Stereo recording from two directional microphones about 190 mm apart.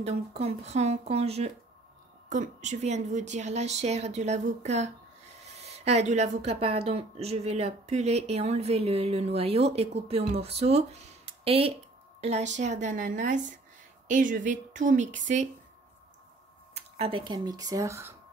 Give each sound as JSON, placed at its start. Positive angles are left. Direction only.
{"t": 0.0, "sound": "a woman's voice", "side_deg": -35}
{"t": 16.7, "sound": "speech", "side_deg": -35}